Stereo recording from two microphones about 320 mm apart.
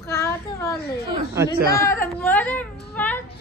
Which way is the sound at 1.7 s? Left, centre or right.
Centre.